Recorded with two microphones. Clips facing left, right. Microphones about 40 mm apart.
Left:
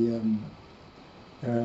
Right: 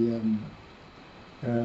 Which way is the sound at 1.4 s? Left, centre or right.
Centre.